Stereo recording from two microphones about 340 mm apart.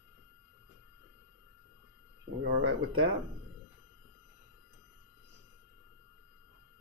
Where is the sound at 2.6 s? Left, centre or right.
Right.